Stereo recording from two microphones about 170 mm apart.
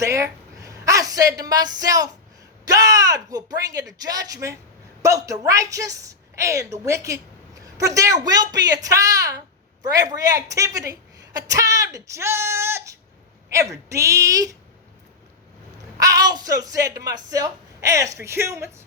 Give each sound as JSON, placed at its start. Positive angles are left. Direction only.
{"t": 0.0, "sound": "a woman's voice", "side_deg": -20}
{"t": 16.0, "sound": "speech", "side_deg": -20}